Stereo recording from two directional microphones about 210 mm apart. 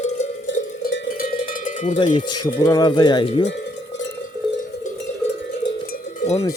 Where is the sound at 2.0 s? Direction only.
20° left (ahead or behind).